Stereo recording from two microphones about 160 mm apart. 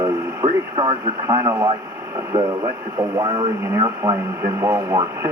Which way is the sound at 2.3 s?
30° right (ahead or behind).